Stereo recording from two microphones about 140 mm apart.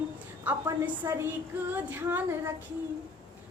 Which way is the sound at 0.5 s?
10° right (ahead or behind).